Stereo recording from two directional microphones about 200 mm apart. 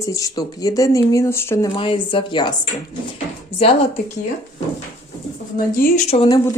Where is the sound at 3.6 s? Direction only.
30° left (ahead or behind).